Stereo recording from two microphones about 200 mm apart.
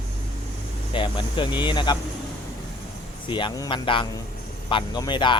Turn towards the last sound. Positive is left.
turn(degrees=25)  # may be behind; listen again after turning